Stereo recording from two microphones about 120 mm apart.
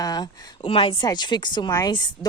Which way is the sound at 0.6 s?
50° left (ahead or behind).